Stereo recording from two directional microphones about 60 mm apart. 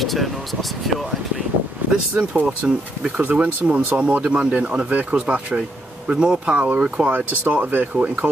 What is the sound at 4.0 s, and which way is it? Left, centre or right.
Speech, centre.